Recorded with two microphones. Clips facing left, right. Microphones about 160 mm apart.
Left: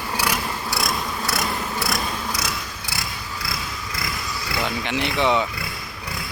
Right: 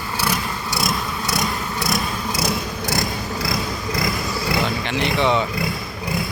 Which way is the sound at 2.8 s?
45° right (ahead or behind).